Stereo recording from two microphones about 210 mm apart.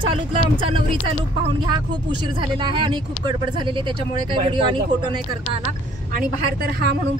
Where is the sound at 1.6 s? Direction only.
20° right (ahead or behind).